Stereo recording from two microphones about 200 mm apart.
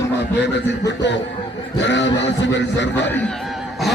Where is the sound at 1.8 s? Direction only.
60° left (ahead or behind).